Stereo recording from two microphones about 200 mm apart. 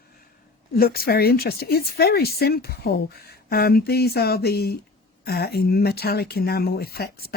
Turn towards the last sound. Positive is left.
turn(degrees=50)  # may be behind; listen again after turning